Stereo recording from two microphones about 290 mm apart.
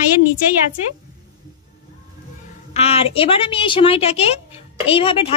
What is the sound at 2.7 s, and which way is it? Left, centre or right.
Speech, left.